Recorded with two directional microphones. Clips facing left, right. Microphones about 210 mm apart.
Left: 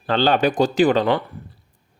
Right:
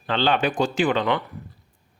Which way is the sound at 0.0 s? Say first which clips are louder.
Left 4 dB; 40° left (ahead or behind).